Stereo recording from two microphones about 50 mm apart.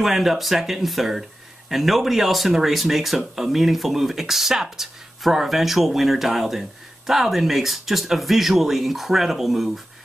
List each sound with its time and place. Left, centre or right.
0.0 s speech: centre